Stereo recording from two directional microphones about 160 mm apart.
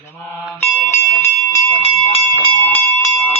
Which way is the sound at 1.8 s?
35° left (ahead or behind).